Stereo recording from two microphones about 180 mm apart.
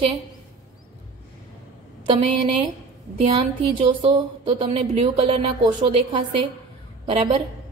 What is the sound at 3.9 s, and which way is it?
Speech, 30° right (ahead or behind).